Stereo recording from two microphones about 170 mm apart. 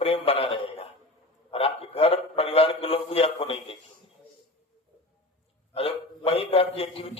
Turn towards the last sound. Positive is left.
turn(degrees=35)  # may be behind; listen again after turning